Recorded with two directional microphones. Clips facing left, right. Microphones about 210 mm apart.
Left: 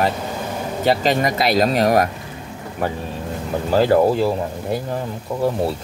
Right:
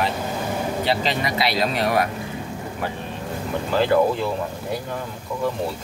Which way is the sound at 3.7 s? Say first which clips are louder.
Left 4 dB; 35° left (ahead or behind).